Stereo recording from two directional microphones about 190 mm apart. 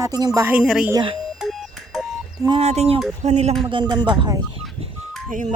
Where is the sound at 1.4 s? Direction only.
Centre (ahead or behind).